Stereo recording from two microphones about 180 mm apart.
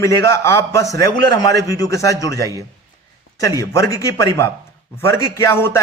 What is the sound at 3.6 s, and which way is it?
A man's voice, 15° left (ahead or behind).